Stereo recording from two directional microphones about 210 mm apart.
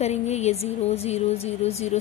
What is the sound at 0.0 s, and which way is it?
Speech, 30° left (ahead or behind).